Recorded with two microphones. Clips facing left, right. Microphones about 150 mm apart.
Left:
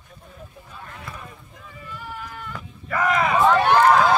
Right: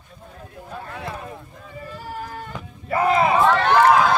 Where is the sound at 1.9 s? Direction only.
40° right (ahead or behind).